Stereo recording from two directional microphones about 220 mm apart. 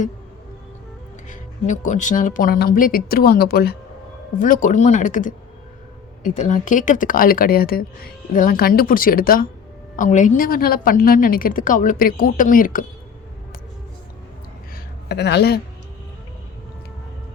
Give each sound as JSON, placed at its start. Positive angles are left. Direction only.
{"t": 1.3, "sound": "a woman's voice", "side_deg": 35}
{"t": 15.1, "sound": "speech", "side_deg": 50}